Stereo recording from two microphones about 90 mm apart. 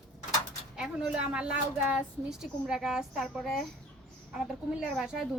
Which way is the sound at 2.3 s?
5° right (ahead or behind).